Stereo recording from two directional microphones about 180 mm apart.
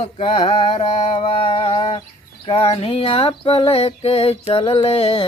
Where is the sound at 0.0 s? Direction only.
35° left (ahead or behind).